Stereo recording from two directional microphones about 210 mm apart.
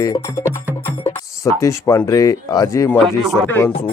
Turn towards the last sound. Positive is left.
turn(degrees=10)  # may be behind; listen again after turning